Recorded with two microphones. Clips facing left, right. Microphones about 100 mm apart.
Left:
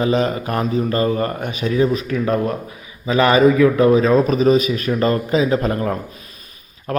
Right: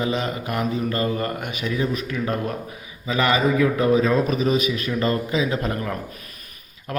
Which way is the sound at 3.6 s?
65° left (ahead or behind).